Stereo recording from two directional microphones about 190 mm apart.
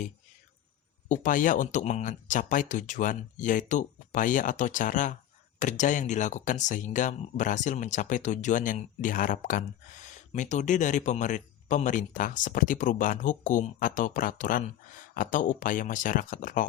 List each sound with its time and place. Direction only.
1.0 s speech: 40° left (ahead or behind)